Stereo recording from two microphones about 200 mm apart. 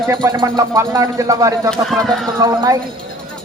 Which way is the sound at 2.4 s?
20° right (ahead or behind).